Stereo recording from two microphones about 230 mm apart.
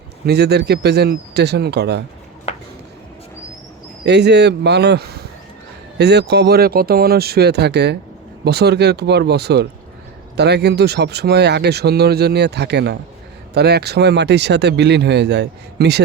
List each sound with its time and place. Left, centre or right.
0.3 s speech: right
2.5 s a sound: left
4.0 s speech: right